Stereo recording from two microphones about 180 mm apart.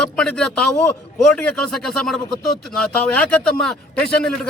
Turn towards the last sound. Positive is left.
turn(degrees=5)  # may be behind; listen again after turning